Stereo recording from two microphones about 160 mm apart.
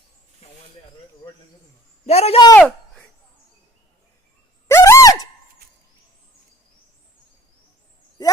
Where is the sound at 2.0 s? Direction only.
40° left (ahead or behind).